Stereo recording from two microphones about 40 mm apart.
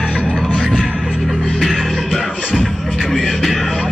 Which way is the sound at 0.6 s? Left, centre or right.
Centre.